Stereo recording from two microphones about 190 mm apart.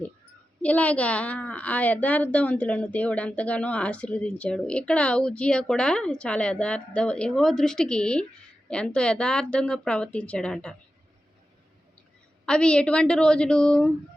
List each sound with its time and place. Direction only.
0.6 s a woman's voice: 5° left (ahead or behind)
12.5 s a woman's voice: 5° left (ahead or behind)